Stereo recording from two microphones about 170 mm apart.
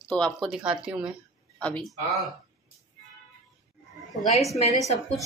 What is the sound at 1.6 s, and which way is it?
Speech, 10° left (ahead or behind).